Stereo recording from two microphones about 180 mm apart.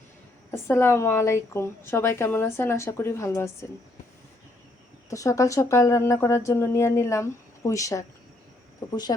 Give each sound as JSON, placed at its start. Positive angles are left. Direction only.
{"t": 0.5, "sound": "a woman's voice", "side_deg": 15}
{"t": 5.0, "sound": "a woman's voice", "side_deg": 20}
{"t": 9.1, "sound": "speech", "side_deg": 25}